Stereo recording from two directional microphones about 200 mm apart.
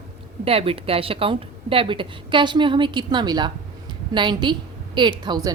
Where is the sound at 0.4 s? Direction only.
30° right (ahead or behind).